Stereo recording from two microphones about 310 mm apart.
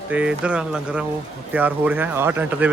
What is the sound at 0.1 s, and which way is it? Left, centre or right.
Speech, centre.